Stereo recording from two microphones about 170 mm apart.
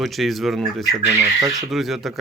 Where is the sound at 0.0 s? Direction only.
Centre (ahead or behind).